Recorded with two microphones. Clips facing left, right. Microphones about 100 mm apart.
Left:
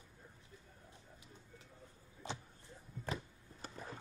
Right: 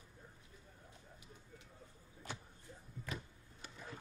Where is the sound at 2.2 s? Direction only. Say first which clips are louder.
Left 3 dB; 20° left (ahead or behind).